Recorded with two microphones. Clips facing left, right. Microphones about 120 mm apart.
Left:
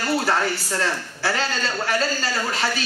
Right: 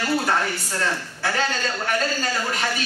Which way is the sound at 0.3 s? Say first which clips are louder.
Left 1 dB; 30° left (ahead or behind).